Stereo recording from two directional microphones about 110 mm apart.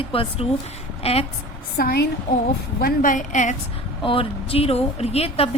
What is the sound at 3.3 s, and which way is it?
Speech, 90° left.